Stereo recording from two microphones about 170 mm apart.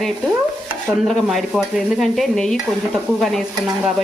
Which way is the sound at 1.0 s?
Centre (ahead or behind).